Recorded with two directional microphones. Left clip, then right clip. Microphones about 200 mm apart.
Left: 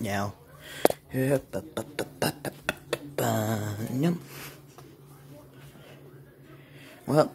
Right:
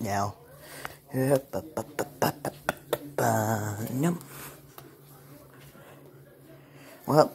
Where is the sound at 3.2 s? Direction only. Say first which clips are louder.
Right 3 dB; 10° left (ahead or behind).